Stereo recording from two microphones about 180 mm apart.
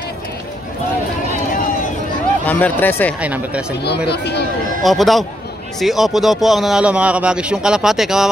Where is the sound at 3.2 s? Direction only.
10° right (ahead or behind).